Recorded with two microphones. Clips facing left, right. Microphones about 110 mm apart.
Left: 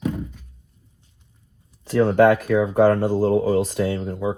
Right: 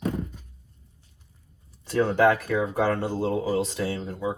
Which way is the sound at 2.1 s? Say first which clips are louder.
Left 6 dB; 60° left (ahead or behind).